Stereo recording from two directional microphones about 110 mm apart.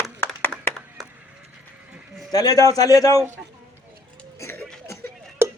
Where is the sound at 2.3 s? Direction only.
35° left (ahead or behind).